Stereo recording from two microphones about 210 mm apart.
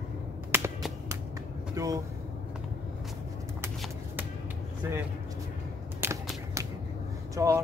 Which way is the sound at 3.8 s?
5° right (ahead or behind).